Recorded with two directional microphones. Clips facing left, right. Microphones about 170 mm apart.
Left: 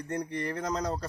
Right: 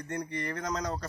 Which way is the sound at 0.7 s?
30° left (ahead or behind).